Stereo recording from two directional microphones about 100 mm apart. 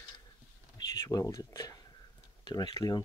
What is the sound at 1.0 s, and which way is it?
Speech, 30° left (ahead or behind).